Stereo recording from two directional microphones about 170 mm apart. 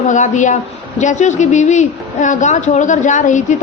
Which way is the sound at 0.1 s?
45° left (ahead or behind).